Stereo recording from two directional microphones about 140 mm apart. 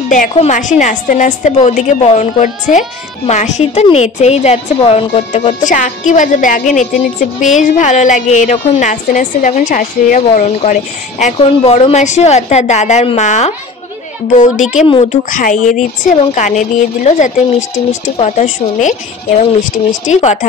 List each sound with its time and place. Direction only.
0.1 s a woman's voice: 60° left (ahead or behind); by 5.6 s 45° left (ahead or behind)
5.6 s a woman's voice: 65° left (ahead or behind)